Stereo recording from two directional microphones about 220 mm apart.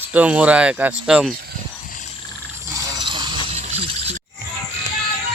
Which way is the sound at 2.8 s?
20° right (ahead or behind).